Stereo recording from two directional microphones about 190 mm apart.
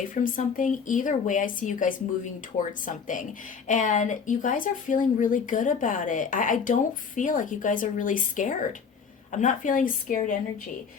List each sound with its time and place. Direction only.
0.1 s speech: 45° left (ahead or behind)